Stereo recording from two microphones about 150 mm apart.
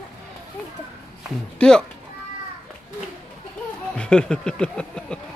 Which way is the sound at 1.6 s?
5° left (ahead or behind).